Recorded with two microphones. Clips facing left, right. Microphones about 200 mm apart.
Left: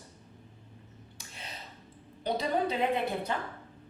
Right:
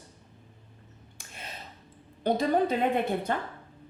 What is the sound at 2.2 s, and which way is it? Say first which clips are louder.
Speech: right 5 dB; 50° right (ahead or behind).